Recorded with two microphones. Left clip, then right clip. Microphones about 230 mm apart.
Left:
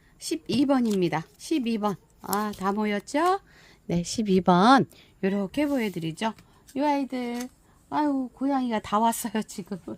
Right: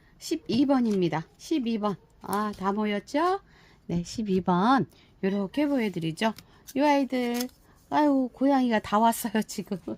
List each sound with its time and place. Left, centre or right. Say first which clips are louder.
0.2 s a woman's voice: even; centre